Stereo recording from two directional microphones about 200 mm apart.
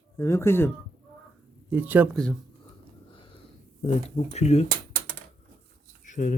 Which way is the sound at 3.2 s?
25° left (ahead or behind).